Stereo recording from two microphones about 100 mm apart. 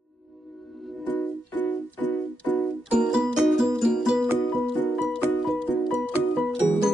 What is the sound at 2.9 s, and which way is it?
Music, 10° right (ahead or behind).